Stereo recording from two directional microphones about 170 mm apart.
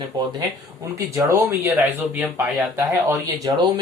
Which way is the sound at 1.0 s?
20° right (ahead or behind).